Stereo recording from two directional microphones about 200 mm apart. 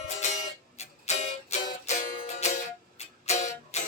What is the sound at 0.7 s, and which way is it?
Music, 35° left (ahead or behind).